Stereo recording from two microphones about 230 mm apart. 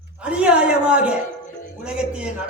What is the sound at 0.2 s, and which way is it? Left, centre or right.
A man's voice, centre.